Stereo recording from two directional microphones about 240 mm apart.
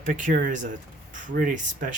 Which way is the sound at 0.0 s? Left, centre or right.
Right.